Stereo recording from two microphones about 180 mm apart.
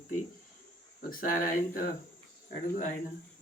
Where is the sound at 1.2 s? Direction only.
50° left (ahead or behind).